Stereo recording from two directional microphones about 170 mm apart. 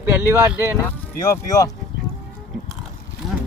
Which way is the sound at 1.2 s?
20° left (ahead or behind).